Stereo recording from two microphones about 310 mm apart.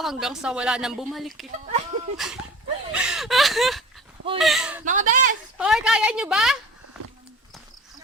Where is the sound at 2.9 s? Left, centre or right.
Centre.